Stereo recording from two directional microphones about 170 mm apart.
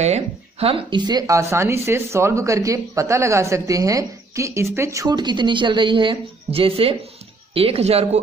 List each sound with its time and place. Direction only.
0.0 s speech: 40° right (ahead or behind)